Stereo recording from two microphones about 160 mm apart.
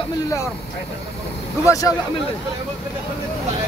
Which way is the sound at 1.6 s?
20° left (ahead or behind).